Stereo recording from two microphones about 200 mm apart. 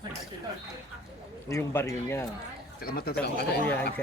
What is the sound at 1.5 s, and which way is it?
Speech, 15° left (ahead or behind).